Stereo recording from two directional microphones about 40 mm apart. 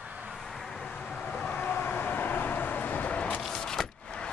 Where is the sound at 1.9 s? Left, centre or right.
Left.